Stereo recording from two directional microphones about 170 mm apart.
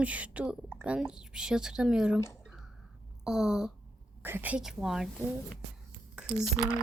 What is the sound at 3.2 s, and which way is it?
Speech, 5° right (ahead or behind).